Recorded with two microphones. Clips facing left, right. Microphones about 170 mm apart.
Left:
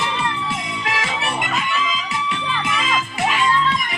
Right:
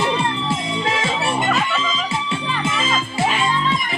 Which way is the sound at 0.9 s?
25° right (ahead or behind).